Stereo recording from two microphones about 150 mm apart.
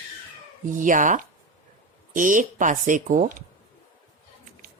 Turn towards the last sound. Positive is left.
turn(degrees=-60)  # may be behind; listen again after turning